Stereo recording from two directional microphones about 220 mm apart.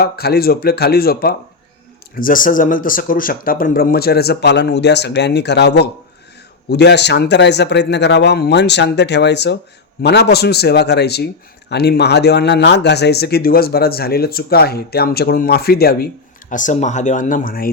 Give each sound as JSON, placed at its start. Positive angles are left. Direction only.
{"t": 0.0, "sound": "speech", "side_deg": 45}